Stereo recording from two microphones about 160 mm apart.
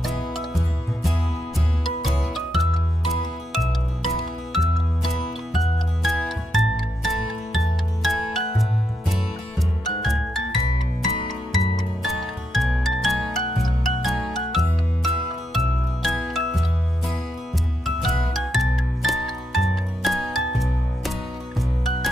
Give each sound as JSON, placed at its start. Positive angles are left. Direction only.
{"t": 0.0, "sound": "music", "side_deg": 0}
{"t": 11.5, "sound": "music", "side_deg": 0}
{"t": 17.8, "sound": "music", "side_deg": 0}